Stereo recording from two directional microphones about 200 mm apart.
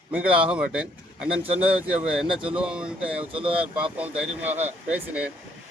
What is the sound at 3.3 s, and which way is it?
Speech, 25° right (ahead or behind).